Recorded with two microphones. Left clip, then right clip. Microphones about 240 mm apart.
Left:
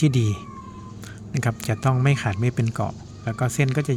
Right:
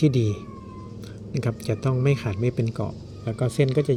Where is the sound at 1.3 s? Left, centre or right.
Left.